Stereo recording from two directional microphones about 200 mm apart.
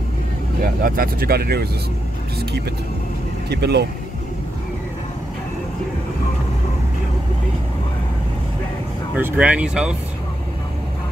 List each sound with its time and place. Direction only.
0.6 s speech: 45° right (ahead or behind)
3.4 s speech: 55° right (ahead or behind)
9.1 s speech: 5° right (ahead or behind)